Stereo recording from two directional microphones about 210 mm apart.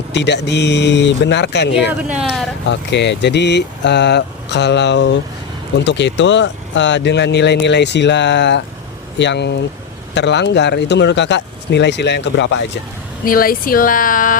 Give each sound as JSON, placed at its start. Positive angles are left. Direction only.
{"t": 0.1, "sound": "speech", "side_deg": 55}
{"t": 1.9, "sound": "speech", "side_deg": -5}
{"t": 2.6, "sound": "speech", "side_deg": 55}
{"t": 13.2, "sound": "speech", "side_deg": 45}